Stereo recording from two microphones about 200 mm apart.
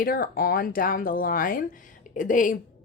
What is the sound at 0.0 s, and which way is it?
A woman's voice, 45° left (ahead or behind).